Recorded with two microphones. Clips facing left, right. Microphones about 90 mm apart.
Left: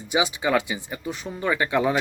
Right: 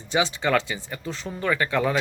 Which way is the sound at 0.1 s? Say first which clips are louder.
Even; 15° left (ahead or behind).